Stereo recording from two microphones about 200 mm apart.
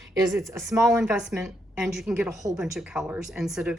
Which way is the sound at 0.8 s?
5° right (ahead or behind).